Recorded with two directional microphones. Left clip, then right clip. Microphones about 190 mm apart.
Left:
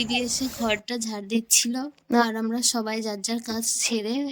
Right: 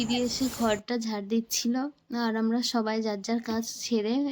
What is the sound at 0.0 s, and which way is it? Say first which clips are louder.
Speech: left 3 dB; 55° left (ahead or behind).